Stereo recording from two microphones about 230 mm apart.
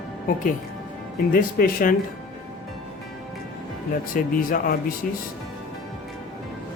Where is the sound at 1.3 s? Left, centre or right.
Left.